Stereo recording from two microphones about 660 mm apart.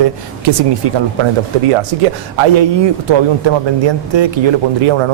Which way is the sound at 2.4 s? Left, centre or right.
Right.